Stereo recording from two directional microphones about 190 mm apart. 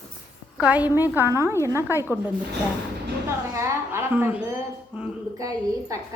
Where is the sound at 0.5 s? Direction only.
5° right (ahead or behind).